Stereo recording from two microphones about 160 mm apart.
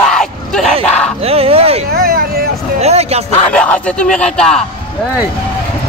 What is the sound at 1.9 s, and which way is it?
Speech, 75° right (ahead or behind).